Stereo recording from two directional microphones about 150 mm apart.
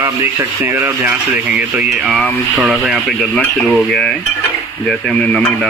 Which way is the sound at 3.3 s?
10° left (ahead or behind).